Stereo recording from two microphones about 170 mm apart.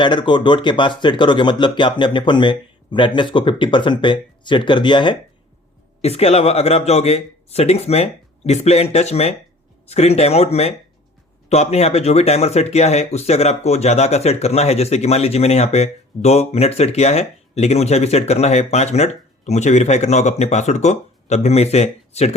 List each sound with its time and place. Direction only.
0.0 s speech: 25° left (ahead or behind)